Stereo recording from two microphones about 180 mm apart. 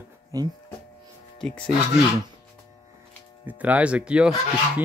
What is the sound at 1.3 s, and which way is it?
Speech, 5° left (ahead or behind).